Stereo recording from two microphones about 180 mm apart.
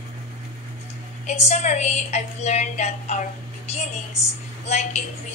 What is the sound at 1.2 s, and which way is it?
A woman's voice, 40° left (ahead or behind).